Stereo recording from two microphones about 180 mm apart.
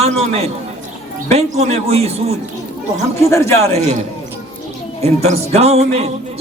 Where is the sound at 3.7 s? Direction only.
40° right (ahead or behind).